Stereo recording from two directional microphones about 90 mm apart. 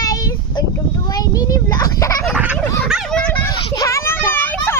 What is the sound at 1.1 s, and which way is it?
A child's voice, 40° left (ahead or behind).